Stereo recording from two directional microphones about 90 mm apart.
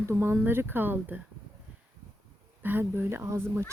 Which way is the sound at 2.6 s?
25° right (ahead or behind).